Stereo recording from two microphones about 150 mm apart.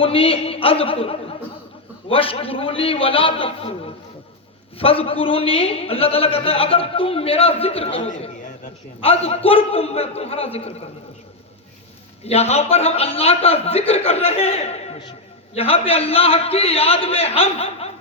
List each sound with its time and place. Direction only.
0.0 s a man's voice: 40° left (ahead or behind)
12.2 s a man's voice: 45° left (ahead or behind)